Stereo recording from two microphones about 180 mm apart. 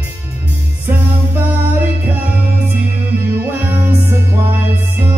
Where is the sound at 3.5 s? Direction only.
10° right (ahead or behind).